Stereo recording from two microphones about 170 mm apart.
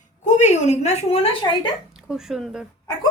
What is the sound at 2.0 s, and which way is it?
Speech, 5° right (ahead or behind).